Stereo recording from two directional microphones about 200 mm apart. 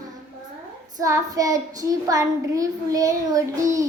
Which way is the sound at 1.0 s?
15° right (ahead or behind).